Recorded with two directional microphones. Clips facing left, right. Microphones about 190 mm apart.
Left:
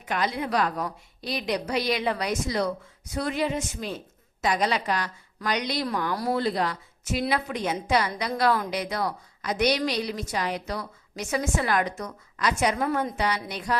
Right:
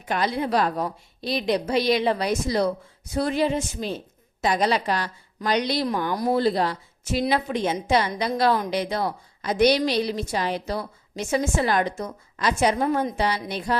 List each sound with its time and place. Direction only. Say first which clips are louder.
0.1 s a woman's voice: right 3 dB; 30° right (ahead or behind)